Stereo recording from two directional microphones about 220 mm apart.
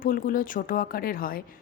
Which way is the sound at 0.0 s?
40° left (ahead or behind).